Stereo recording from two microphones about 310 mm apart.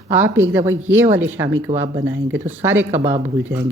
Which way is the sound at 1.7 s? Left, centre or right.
Right.